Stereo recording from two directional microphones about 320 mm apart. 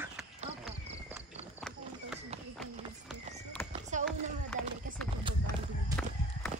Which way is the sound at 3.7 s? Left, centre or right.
Right.